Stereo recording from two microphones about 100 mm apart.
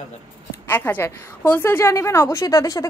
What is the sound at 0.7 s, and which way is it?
A woman's voice, 20° left (ahead or behind).